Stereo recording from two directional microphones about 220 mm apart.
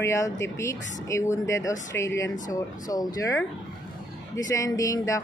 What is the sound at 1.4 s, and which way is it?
Speech, 15° left (ahead or behind).